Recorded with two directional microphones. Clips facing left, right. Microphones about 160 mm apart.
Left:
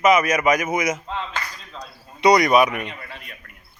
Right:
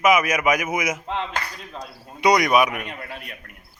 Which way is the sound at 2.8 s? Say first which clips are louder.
Right 2 dB; 55° right (ahead or behind).